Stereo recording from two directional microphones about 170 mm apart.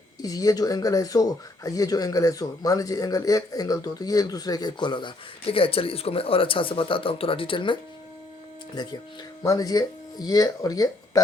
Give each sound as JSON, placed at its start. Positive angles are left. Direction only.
{"t": 0.2, "sound": "speech", "side_deg": 20}